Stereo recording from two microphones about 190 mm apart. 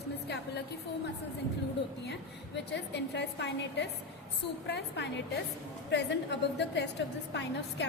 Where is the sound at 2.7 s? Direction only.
65° left (ahead or behind).